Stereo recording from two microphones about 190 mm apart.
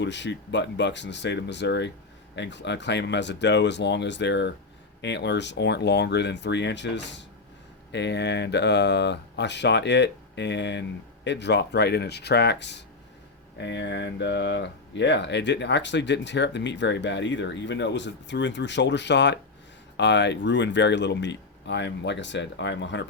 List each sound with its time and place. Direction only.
0.0 s speech: 65° left (ahead or behind)